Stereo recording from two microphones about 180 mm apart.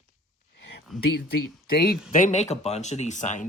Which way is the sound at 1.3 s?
55° left (ahead or behind).